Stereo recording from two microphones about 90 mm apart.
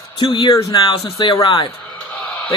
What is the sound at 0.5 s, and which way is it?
Speech, 45° left (ahead or behind).